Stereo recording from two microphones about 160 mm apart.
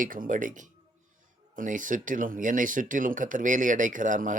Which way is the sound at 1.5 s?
55° right (ahead or behind).